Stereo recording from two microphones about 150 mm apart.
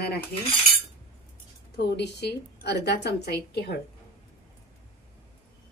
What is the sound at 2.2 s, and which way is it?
A woman's voice, 90° left.